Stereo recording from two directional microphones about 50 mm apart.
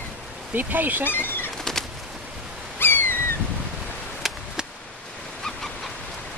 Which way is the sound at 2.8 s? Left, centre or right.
Left.